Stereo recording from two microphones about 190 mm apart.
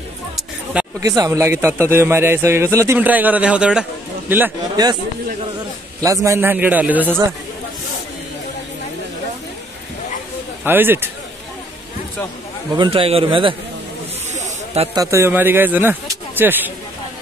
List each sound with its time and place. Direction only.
1.0 s a man's voice: 20° right (ahead or behind)
4.8 s a man's voice: 20° right (ahead or behind)
5.9 s a man's voice: 15° right (ahead or behind)
10.6 s a man's voice: 10° right (ahead or behind)
12.7 s a man's voice: 25° right (ahead or behind)
15.0 s a man's voice: 15° right (ahead or behind)